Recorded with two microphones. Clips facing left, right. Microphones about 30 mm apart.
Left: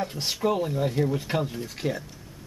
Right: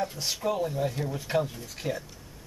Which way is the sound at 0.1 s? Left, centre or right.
Left.